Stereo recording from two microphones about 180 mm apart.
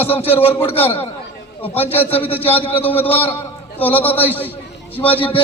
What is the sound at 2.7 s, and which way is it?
Speech, 10° left (ahead or behind).